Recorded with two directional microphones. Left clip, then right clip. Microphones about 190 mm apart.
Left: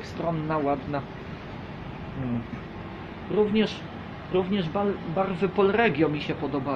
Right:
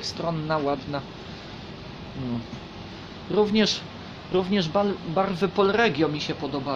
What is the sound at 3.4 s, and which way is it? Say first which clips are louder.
Speech: right 2 dB; 35° right (ahead or behind).